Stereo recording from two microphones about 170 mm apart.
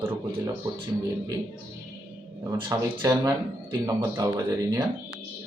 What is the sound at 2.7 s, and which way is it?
Speech, 20° right (ahead or behind).